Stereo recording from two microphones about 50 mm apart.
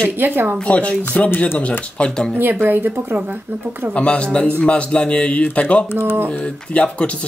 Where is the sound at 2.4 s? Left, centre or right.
Right.